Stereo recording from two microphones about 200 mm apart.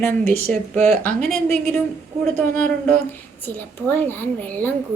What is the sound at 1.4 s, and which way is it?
Speech, 35° right (ahead or behind).